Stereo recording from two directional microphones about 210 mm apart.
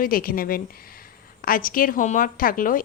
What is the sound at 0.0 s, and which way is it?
A woman's voice, 45° left (ahead or behind).